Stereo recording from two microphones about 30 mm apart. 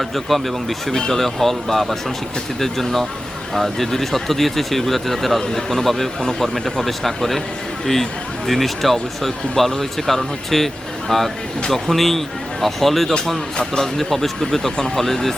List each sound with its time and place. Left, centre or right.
0.0 s speech: centre
8.4 s speech: centre